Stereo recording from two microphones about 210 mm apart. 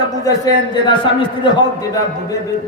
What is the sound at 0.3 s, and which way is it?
Music, 15° left (ahead or behind).